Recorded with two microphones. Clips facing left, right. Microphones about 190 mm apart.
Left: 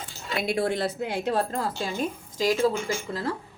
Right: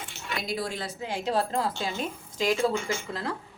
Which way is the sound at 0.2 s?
30° left (ahead or behind).